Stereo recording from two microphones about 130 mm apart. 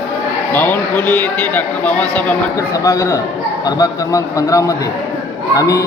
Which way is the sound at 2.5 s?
25° left (ahead or behind).